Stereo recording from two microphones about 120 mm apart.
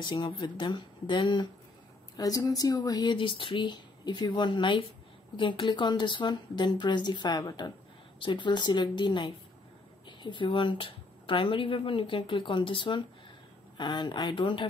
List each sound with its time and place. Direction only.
0.0 s speech: 40° left (ahead or behind)